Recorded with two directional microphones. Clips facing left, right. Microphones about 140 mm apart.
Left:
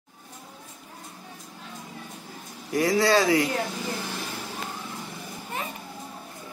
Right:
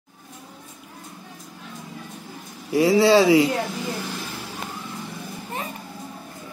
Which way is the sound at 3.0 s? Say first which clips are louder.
Right 6 dB; 25° right (ahead or behind).